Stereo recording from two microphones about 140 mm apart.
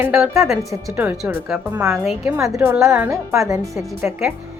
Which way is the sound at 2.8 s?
5° right (ahead or behind).